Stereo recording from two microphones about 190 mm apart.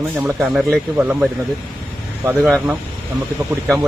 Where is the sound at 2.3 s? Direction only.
Centre (ahead or behind).